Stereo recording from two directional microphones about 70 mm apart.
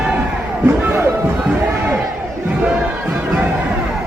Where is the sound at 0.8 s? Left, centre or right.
Right.